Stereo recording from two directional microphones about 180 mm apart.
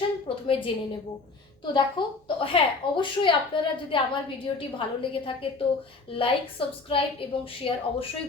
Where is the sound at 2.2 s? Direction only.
30° left (ahead or behind).